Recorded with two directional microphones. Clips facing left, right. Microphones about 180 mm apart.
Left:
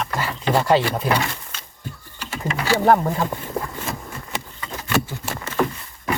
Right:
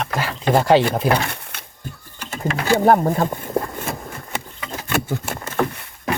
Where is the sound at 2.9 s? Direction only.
30° right (ahead or behind).